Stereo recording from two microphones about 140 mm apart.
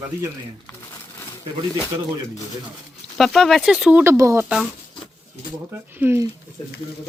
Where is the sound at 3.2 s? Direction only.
Centre (ahead or behind).